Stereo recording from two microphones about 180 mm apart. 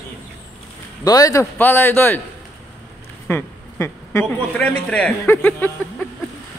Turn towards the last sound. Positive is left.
turn(degrees=10)  # may be behind; listen again after turning